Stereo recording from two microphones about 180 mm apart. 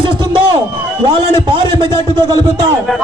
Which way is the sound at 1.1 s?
25° right (ahead or behind).